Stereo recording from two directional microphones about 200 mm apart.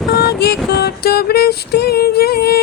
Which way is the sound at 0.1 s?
50° left (ahead or behind).